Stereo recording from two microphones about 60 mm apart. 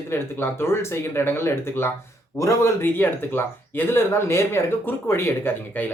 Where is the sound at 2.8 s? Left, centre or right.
Left.